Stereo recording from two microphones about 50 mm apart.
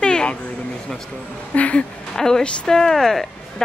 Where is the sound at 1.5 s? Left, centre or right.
Left.